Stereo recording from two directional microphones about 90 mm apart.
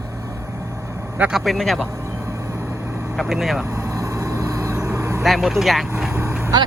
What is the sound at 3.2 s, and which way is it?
Speech, 5° right (ahead or behind).